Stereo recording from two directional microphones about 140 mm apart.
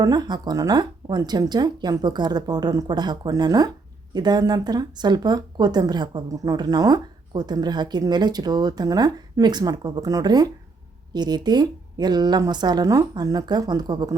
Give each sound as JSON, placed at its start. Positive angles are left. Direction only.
{"t": 0.0, "sound": "speech", "side_deg": -30}